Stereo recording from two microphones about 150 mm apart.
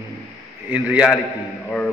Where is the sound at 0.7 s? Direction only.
10° right (ahead or behind).